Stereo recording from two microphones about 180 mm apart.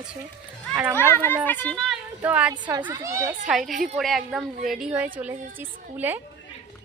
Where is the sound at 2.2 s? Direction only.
10° right (ahead or behind).